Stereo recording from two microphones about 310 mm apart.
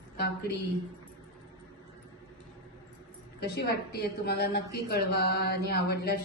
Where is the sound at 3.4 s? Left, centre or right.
Left.